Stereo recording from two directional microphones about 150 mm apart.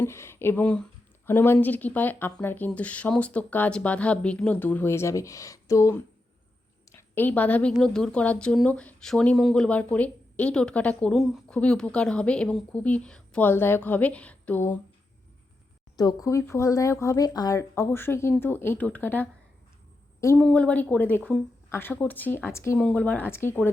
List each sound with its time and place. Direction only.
0.0 s a woman's voice: 15° left (ahead or behind)
16.0 s speech: 25° left (ahead or behind)